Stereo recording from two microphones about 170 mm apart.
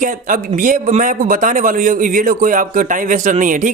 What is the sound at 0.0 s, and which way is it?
Speech, 50° right (ahead or behind).